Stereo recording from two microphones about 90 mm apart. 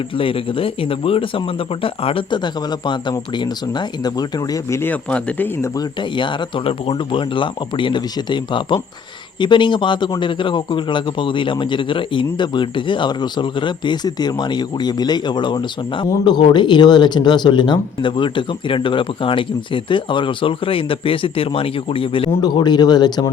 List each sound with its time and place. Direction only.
0.2 s speech: 80° left; by 4.6 s 45° left (ahead or behind)
4.7 s speech: 25° left (ahead or behind)
5.0 s speech: 15° left (ahead or behind)
6.0 s speech: 65° left (ahead or behind); by 22.3 s 80° left
22.4 s speech: 50° left (ahead or behind)